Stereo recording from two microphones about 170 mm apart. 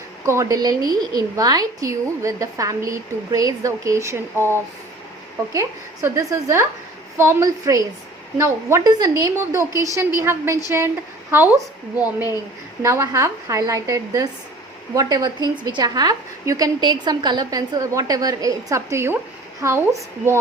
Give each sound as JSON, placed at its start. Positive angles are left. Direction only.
{"t": 0.3, "sound": "a woman's voice", "side_deg": -20}